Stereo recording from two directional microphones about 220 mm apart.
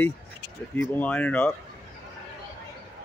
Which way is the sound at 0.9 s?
5° left (ahead or behind).